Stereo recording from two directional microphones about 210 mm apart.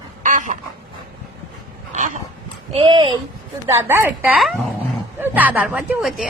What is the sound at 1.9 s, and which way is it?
Dog, 35° right (ahead or behind).